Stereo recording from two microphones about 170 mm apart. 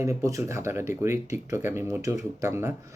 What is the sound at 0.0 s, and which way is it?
Speech, 20° right (ahead or behind).